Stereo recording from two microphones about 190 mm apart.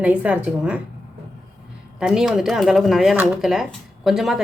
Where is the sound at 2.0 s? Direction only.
5° right (ahead or behind).